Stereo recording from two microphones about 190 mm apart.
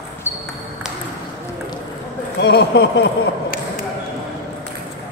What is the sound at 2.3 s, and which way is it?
Speech, 60° left (ahead or behind).